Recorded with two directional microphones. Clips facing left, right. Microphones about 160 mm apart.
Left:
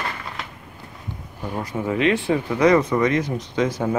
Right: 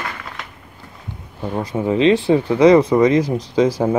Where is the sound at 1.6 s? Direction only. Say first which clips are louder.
Right 5 dB; 25° right (ahead or behind).